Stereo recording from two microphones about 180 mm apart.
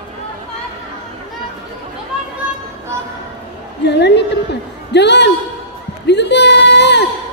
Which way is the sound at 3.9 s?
70° left (ahead or behind).